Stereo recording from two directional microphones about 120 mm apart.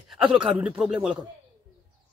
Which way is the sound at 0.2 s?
45° right (ahead or behind).